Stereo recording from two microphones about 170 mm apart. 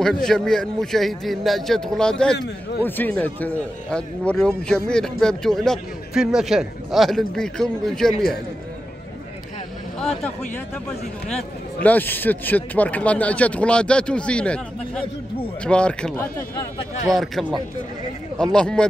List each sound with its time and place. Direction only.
0.0 s a man's voice: 5° left (ahead or behind)
2.3 s a man's voice: 80° left
2.8 s a man's voice: 10° left (ahead or behind)
9.9 s speech: 5° left (ahead or behind)
11.3 s a man's voice: 10° left (ahead or behind)